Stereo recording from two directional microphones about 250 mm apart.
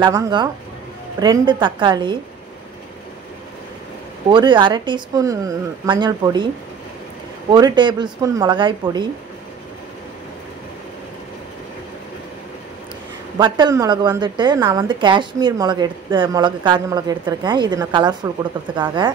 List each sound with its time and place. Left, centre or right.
0.0 s a woman's voice: centre
4.3 s a woman's voice: centre
7.5 s a woman's voice: centre
13.4 s a woman's voice: centre